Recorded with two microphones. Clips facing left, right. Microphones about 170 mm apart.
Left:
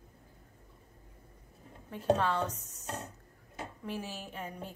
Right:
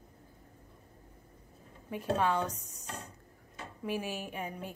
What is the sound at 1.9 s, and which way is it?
Speech, 10° right (ahead or behind).